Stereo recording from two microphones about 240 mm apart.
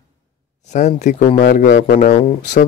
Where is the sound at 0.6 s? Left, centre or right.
Left.